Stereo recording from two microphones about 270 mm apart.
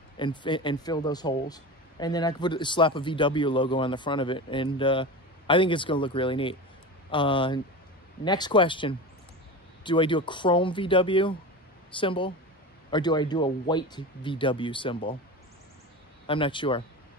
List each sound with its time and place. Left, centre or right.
0.2 s speech: centre
16.3 s speech: centre